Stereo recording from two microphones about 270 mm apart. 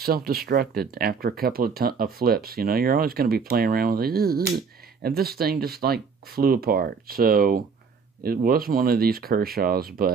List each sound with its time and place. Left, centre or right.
0.0 s speech: right